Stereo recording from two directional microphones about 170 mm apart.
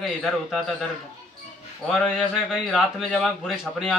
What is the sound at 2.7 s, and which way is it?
Speech, centre (ahead or behind).